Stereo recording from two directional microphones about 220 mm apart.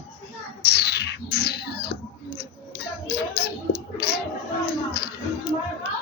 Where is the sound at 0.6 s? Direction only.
45° left (ahead or behind).